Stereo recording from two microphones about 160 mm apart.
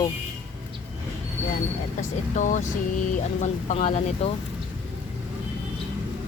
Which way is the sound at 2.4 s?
55° left (ahead or behind).